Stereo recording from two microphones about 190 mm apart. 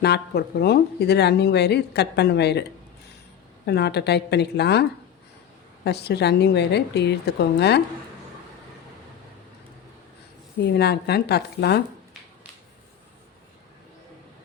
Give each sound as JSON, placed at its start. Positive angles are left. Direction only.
{"t": 0.0, "sound": "speech", "side_deg": 60}
{"t": 3.7, "sound": "speech", "side_deg": 60}
{"t": 10.7, "sound": "speech", "side_deg": 60}